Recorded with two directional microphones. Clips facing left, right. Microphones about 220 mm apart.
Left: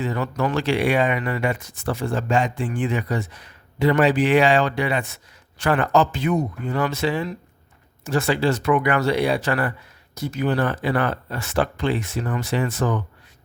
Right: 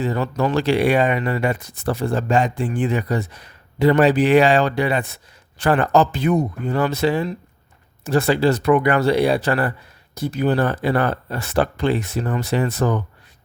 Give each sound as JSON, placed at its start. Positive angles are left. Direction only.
{"t": 0.0, "sound": "speech", "side_deg": -35}